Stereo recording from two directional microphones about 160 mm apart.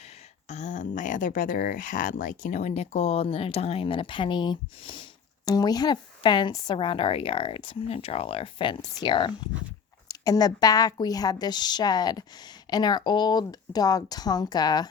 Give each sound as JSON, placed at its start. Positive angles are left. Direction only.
{"t": 0.4, "sound": "a woman's voice", "side_deg": 45}